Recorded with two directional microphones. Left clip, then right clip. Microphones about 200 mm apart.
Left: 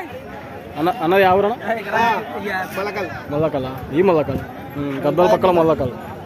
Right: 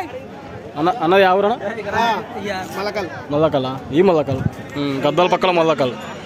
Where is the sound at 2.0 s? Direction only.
45° right (ahead or behind).